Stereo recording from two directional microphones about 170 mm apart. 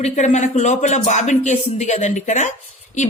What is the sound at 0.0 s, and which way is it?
A woman's voice, 45° left (ahead or behind).